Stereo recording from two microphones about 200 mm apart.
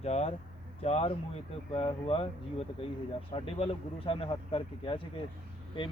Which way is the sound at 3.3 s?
30° left (ahead or behind).